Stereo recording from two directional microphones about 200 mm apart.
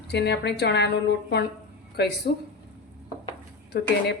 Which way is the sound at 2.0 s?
55° left (ahead or behind).